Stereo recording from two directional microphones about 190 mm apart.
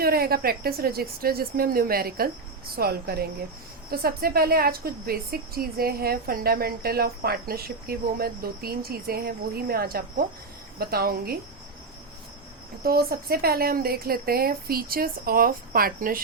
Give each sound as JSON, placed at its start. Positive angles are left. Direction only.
{"t": 0.0, "sound": "a woman's voice", "side_deg": -55}
{"t": 12.8, "sound": "a woman's voice", "side_deg": -50}